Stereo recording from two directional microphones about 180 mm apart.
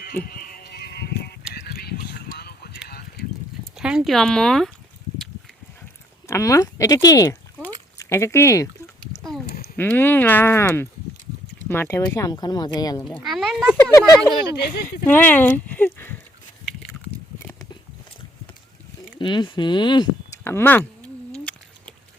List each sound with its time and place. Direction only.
0.0 s a sound: 55° left (ahead or behind)
3.8 s speech: 5° right (ahead or behind)
6.2 s speech: 15° left (ahead or behind)
9.7 s speech: 10° left (ahead or behind)
13.1 s speech: centre (ahead or behind)
13.7 s speech: 15° left (ahead or behind)
19.2 s speech: 25° left (ahead or behind)
20.4 s speech: 10° left (ahead or behind)
21.3 s a sound: 5° left (ahead or behind)